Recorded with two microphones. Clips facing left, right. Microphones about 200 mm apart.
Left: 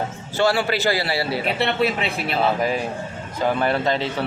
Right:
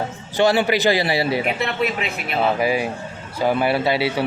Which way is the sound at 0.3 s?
20° right (ahead or behind).